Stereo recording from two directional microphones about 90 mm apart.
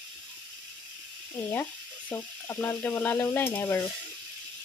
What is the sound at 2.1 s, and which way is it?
Sizzle, 25° left (ahead or behind).